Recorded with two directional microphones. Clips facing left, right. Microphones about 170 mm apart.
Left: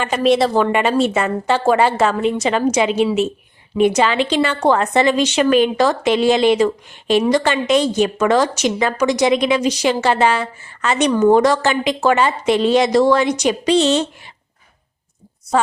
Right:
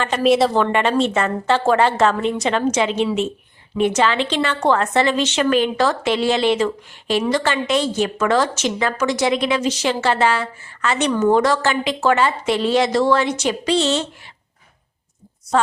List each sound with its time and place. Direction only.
0.2 s a woman's voice: centre (ahead or behind)
0.5 s a woman's voice: 10° left (ahead or behind)